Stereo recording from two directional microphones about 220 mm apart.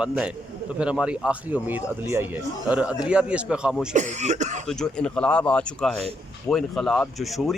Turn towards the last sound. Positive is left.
turn(degrees=0)  # may be behind; listen again after turning